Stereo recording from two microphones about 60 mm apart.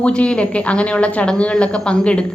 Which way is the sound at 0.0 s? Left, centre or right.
Centre.